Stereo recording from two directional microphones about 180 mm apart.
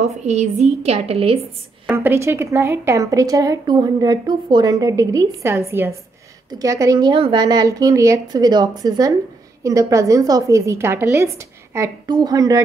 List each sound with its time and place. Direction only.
0.0 s a woman's voice: 40° right (ahead or behind)
1.9 s a woman's voice: 15° right (ahead or behind)